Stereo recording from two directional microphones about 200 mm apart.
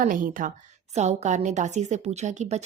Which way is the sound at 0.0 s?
40° right (ahead or behind).